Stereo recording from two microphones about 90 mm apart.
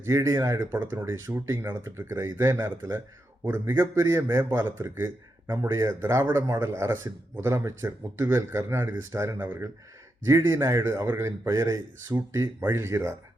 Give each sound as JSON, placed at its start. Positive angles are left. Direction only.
{"t": 0.0, "sound": "a man's voice", "side_deg": -30}